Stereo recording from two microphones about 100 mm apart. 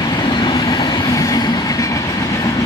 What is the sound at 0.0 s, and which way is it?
Train, 50° left (ahead or behind).